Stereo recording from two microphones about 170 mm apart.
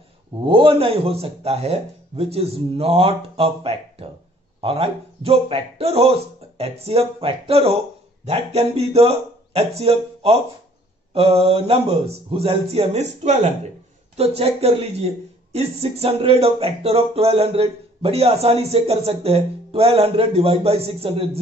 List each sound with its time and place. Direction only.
0.5 s speech: 30° right (ahead or behind)